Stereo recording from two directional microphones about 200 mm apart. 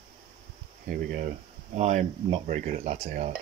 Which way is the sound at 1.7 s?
35° right (ahead or behind).